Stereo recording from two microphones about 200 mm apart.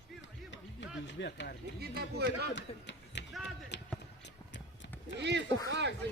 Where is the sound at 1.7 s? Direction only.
55° right (ahead or behind).